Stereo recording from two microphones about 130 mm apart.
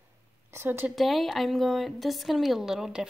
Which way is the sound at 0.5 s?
15° right (ahead or behind).